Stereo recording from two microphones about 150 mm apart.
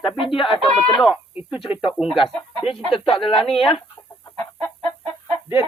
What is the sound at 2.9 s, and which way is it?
Speech, 35° left (ahead or behind).